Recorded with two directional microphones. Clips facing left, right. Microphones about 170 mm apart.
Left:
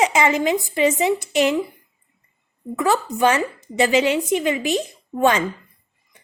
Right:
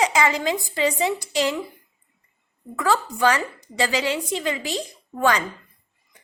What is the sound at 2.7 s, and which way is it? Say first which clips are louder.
A woman's voice: left 3 dB; 20° left (ahead or behind).